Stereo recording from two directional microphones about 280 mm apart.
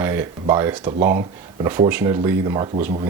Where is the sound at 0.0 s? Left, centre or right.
Centre.